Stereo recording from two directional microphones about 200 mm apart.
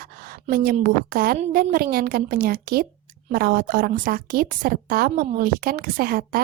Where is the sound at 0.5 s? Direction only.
45° right (ahead or behind).